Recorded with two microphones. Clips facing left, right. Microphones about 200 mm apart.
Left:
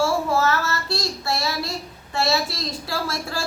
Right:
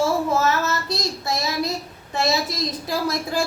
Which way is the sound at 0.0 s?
20° right (ahead or behind).